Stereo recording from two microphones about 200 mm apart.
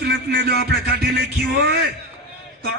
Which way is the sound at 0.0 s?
50° right (ahead or behind).